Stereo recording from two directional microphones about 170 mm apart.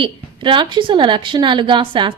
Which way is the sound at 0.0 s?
30° right (ahead or behind).